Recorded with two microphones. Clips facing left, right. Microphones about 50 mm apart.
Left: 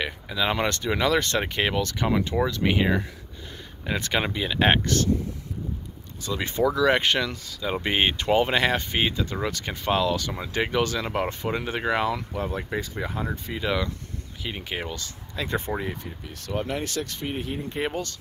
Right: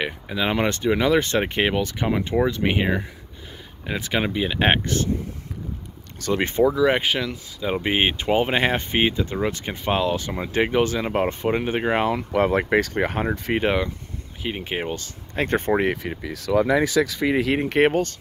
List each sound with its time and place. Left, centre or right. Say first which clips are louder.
0.0 s speech: right 2 dB; centre
6.3 s speech: right 6 dB; right
6.6 s speech: right 1 dB; centre
12.4 s speech: right 10 dB; right
13.6 s speech: right 2 dB; right
17.0 s speech: right 10 dB; right
17.8 s speech: right 7 dB; right